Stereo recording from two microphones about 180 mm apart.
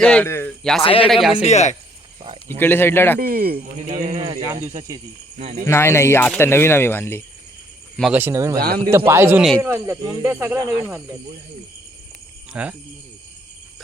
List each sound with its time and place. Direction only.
0.0 s speech: 5° left (ahead or behind)
0.8 s speech: 30° left (ahead or behind)
2.6 s speech: 10° left (ahead or behind)
3.2 s speech: 55° right (ahead or behind)
4.2 s speech: 20° right (ahead or behind)
5.4 s speech: 40° right (ahead or behind)
5.6 s speech: 15° left (ahead or behind)
8.1 s speech: 15° right (ahead or behind)
8.5 s speech: 60° right (ahead or behind)
8.9 s speech: 15° right (ahead or behind)
12.5 s speech: 5° right (ahead or behind)